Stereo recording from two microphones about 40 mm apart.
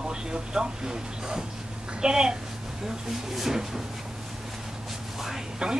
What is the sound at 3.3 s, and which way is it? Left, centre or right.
Speech, centre.